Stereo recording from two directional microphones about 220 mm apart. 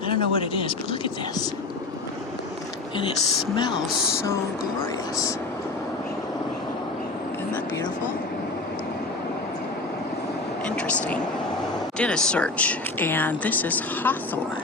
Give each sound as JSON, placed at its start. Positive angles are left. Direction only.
{"t": 0.1, "sound": "speech", "side_deg": 25}
{"t": 10.8, "sound": "vehicle", "side_deg": 5}
{"t": 11.9, "sound": "speech", "side_deg": 5}